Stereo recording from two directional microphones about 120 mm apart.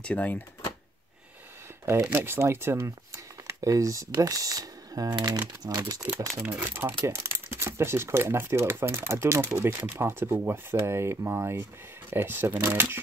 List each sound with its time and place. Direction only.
0.0 s speech: 10° left (ahead or behind)
2.0 s speech: 15° right (ahead or behind)
6.5 s speech: 20° right (ahead or behind)